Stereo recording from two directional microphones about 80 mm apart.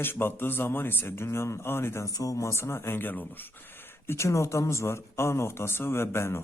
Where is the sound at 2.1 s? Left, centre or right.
Left.